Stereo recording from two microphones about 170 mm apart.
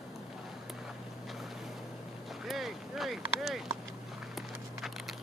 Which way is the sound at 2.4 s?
Centre (ahead or behind).